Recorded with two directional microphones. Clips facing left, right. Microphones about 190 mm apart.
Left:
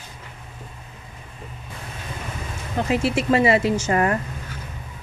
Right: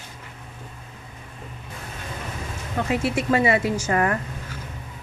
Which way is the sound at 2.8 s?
25° left (ahead or behind).